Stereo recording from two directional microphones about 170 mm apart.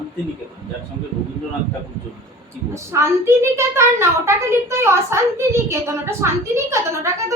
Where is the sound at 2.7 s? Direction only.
15° right (ahead or behind).